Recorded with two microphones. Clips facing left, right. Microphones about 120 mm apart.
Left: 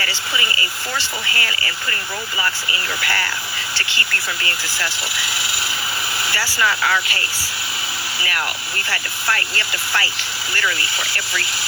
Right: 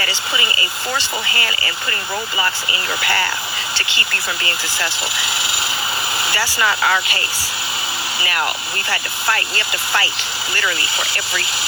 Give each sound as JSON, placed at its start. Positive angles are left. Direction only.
{"t": 0.0, "sound": "speech", "side_deg": -20}